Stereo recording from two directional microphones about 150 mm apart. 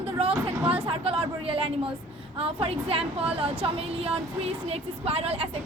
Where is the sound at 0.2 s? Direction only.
40° right (ahead or behind).